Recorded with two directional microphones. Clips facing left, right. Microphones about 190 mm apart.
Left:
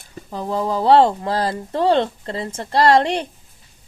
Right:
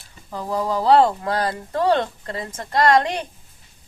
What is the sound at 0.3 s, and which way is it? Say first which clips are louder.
Speech: left 2 dB; 25° left (ahead or behind).